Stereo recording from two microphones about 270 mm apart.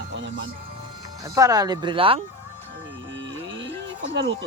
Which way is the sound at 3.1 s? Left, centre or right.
Right.